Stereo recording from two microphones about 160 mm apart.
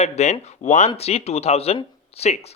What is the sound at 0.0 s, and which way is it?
Speech, 45° left (ahead or behind).